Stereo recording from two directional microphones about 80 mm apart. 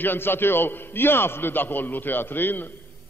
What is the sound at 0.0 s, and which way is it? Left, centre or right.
A man's voice, left.